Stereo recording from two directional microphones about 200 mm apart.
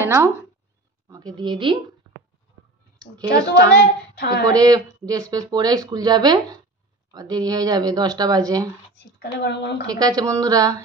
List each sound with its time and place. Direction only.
0.0 s speech: 10° right (ahead or behind)
3.0 s speech: 20° right (ahead or behind)
4.2 s speech: 55° left (ahead or behind)
4.5 s speech: 20° right (ahead or behind)
9.2 s speech: 60° left (ahead or behind)
9.8 s speech: 20° right (ahead or behind)